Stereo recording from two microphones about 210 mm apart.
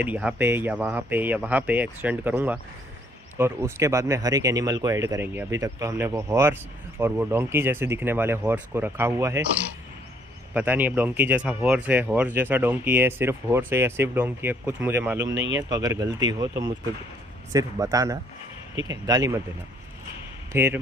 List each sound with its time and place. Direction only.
0.0 s speech: 5° right (ahead or behind)
10.5 s speech: 10° right (ahead or behind)
20.5 s speech: 10° right (ahead or behind)